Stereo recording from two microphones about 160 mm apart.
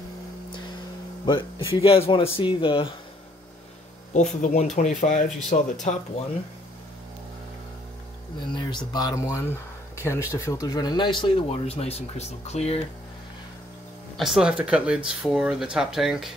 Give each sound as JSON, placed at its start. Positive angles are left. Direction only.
{"t": 1.7, "sound": "speech", "side_deg": 35}
{"t": 4.1, "sound": "speech", "side_deg": 50}
{"t": 8.5, "sound": "speech", "side_deg": 30}
{"t": 14.1, "sound": "speech", "side_deg": 0}